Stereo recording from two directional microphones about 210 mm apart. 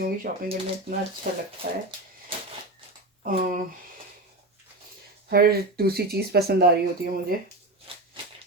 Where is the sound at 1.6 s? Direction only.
50° right (ahead or behind).